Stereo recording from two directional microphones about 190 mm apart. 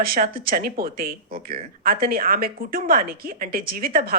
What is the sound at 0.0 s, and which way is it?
A woman's voice, 50° right (ahead or behind).